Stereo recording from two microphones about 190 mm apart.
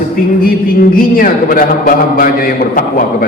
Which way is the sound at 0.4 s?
50° left (ahead or behind).